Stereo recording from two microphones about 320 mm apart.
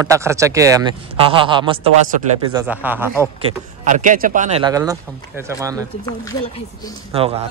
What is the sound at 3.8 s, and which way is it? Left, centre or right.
Speech, right.